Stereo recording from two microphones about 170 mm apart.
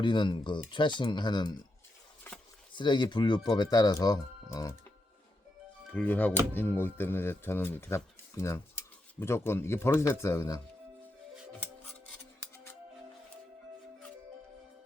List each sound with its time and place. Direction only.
0.0 s speech: 25° left (ahead or behind)
2.7 s speech: 25° left (ahead or behind)
5.9 s speech: 10° left (ahead or behind)